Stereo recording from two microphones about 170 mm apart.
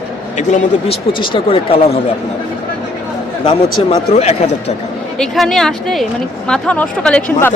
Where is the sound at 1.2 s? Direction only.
30° left (ahead or behind).